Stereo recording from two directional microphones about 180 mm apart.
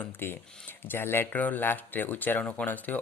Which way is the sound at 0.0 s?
10° left (ahead or behind).